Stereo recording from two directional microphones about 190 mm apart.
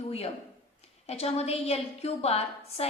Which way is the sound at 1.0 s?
35° left (ahead or behind).